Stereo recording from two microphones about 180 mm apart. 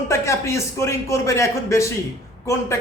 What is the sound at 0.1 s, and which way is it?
A man's voice, 15° left (ahead or behind).